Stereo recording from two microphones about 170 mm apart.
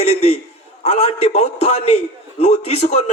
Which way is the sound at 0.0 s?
35° left (ahead or behind).